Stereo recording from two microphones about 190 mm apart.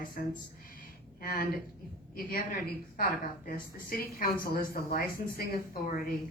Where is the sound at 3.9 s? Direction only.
50° left (ahead or behind).